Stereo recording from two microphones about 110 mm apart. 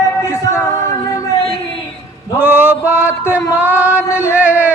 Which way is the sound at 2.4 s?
15° right (ahead or behind).